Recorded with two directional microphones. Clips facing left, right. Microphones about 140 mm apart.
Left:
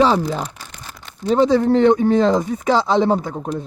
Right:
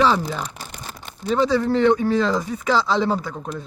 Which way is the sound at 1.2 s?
20° left (ahead or behind).